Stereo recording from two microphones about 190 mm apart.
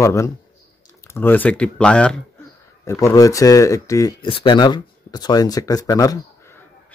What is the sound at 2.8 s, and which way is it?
Speech, 15° left (ahead or behind).